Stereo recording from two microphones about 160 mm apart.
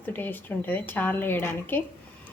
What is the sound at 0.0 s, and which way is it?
A woman's voice, 10° left (ahead or behind).